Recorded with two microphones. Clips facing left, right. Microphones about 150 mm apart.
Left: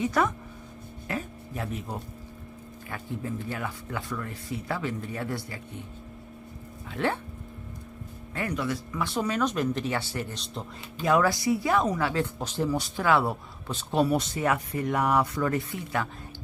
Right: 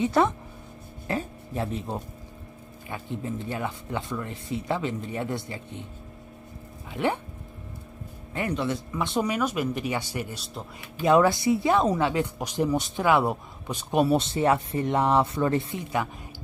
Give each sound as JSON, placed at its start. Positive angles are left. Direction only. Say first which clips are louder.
{"t": 0.0, "sound": "a woman's voice", "louder": "right 3 dB", "side_deg": -25}
{"t": 1.0, "sound": "a sound", "louder": "right 4 dB", "side_deg": -30}
{"t": 2.9, "sound": "a woman's voice", "louder": "right 2 dB", "side_deg": -20}
{"t": 6.9, "sound": "speech", "louder": "right 2 dB", "side_deg": -15}
{"t": 8.4, "sound": "speech", "louder": "right 2 dB", "side_deg": -25}
{"t": 11.0, "sound": "a woman's voice", "louder": "right 4 dB", "side_deg": -25}
{"t": 14.0, "sound": "a woman's voice", "louder": "right 5 dB", "side_deg": -25}